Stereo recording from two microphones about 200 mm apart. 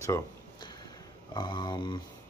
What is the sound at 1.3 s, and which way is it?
Mantra, 20° left (ahead or behind).